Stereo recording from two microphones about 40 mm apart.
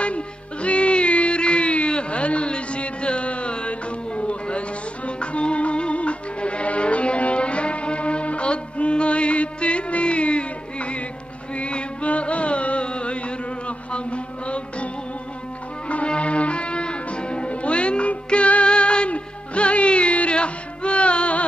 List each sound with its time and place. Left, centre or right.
0.0 s music: left
15.9 s music: left